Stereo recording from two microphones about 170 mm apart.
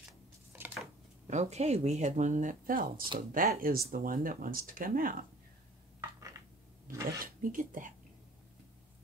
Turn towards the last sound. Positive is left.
turn(degrees=-55)  # may be behind; listen again after turning